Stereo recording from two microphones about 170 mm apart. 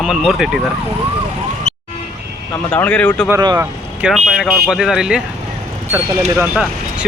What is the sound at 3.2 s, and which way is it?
Speech, 20° right (ahead or behind).